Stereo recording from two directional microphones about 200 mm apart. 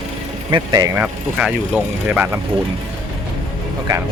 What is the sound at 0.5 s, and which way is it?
Speech, 20° right (ahead or behind).